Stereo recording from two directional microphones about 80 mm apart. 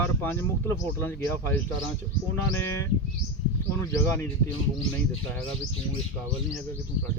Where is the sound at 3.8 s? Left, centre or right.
Left.